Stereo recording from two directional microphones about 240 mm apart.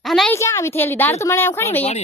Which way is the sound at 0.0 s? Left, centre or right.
Centre.